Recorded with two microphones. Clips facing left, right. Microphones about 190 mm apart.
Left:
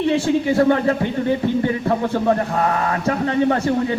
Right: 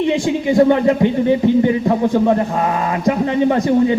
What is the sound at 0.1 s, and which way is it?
Speech, 15° right (ahead or behind).